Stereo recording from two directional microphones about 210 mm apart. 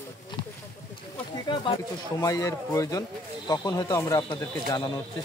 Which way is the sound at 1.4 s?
20° left (ahead or behind).